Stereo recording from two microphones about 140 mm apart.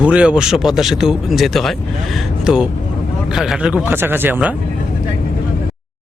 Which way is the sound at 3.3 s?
5° right (ahead or behind).